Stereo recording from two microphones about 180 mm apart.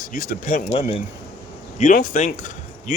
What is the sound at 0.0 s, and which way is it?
Speech, 45° left (ahead or behind).